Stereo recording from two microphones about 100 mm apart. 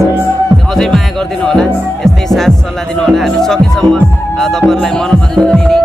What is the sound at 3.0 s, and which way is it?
Speech, 5° left (ahead or behind).